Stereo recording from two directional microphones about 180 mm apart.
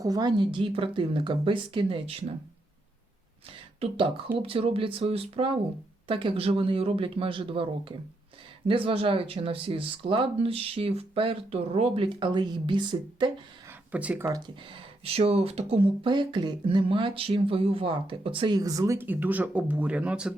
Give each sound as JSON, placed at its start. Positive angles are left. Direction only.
{"t": 0.0, "sound": "speech", "side_deg": -20}
{"t": 3.8, "sound": "speech", "side_deg": -30}
{"t": 13.9, "sound": "speech", "side_deg": -10}
{"t": 14.3, "sound": "speech", "side_deg": -25}